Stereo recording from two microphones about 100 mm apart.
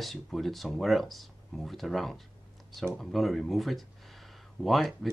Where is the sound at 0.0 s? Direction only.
Centre (ahead or behind).